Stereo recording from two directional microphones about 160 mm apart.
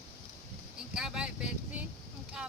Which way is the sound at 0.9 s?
5° right (ahead or behind).